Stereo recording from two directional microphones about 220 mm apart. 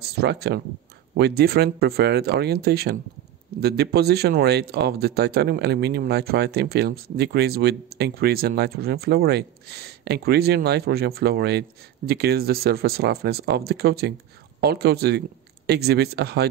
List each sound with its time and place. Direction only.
0.1 s speech: 45° right (ahead or behind)